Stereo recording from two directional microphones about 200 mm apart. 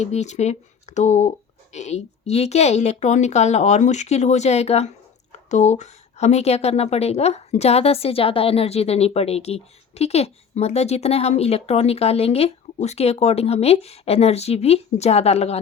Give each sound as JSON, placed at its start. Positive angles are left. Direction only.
{"t": 0.0, "sound": "a woman's voice", "side_deg": 35}